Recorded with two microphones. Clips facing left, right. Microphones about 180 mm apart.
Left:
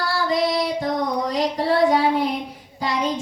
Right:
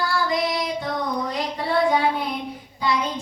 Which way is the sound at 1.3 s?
35° left (ahead or behind).